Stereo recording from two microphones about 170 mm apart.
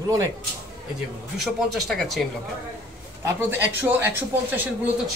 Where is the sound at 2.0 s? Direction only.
Centre (ahead or behind).